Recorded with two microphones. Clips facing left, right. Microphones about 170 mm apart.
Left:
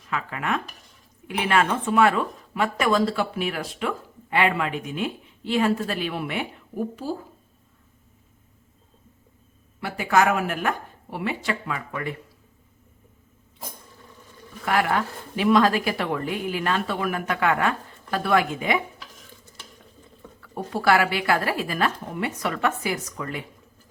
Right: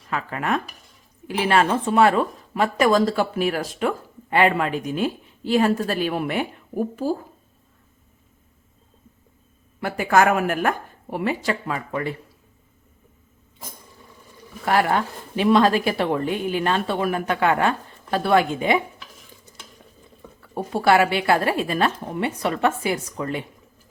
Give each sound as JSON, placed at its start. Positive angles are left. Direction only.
{"t": 0.1, "sound": "speech", "side_deg": -40}
{"t": 9.8, "sound": "speech", "side_deg": -50}
{"t": 14.6, "sound": "speech", "side_deg": -35}
{"t": 20.4, "sound": "speech", "side_deg": -25}